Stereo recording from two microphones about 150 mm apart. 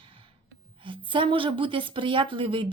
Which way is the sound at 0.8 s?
35° right (ahead or behind).